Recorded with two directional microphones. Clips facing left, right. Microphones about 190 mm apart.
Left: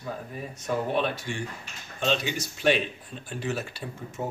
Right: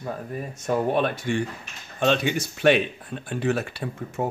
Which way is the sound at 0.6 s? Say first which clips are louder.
Right 4 dB; 50° right (ahead or behind).